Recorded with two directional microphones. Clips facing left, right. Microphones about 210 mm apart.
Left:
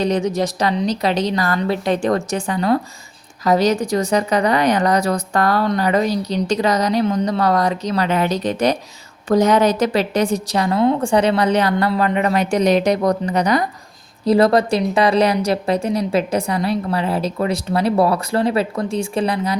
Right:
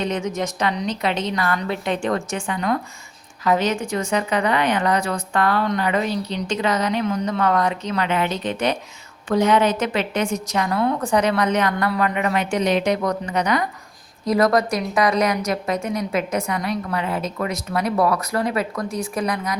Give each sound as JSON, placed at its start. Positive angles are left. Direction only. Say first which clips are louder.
{"t": 0.0, "sound": "a woman's voice", "louder": "left 5 dB", "side_deg": 35}